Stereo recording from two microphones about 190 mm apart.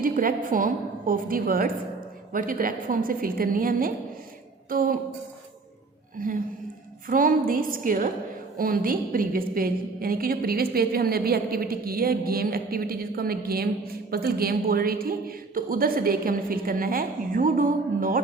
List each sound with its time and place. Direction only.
0.0 s a woman's voice: 45° right (ahead or behind)
6.1 s a woman's voice: 45° right (ahead or behind)